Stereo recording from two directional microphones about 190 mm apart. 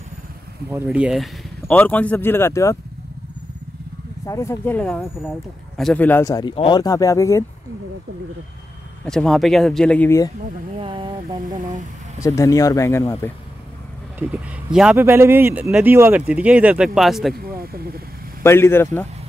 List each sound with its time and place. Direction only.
0.7 s speech: 10° right (ahead or behind); by 2.8 s 15° left (ahead or behind)
4.3 s speech: 15° left (ahead or behind)
9.0 s speech: 5° left (ahead or behind)
10.8 s speech: 25° right (ahead or behind)
12.2 s speech: 15° left (ahead or behind)
14.2 s speech: 5° right (ahead or behind)
17.5 s a sound: 50° right (ahead or behind)
18.4 s speech: 15° left (ahead or behind)